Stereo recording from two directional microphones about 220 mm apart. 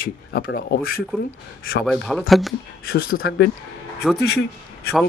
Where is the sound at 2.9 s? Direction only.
40° left (ahead or behind).